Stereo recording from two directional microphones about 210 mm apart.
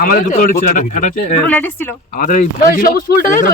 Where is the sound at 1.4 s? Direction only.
10° left (ahead or behind).